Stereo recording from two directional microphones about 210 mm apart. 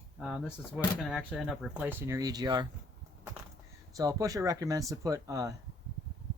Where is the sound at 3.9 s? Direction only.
15° right (ahead or behind).